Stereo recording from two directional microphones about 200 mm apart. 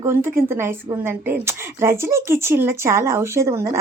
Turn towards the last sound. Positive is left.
turn(degrees=-15)  # may be behind; listen again after turning